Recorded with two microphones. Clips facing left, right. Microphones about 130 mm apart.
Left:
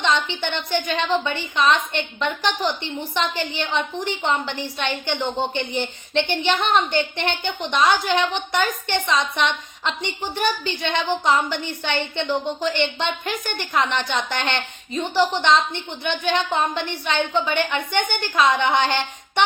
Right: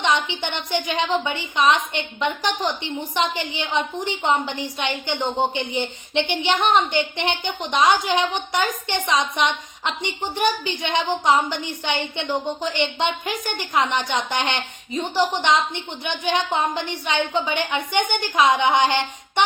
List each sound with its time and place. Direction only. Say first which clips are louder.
0.0 s a woman's voice: even; 15° right (ahead or behind)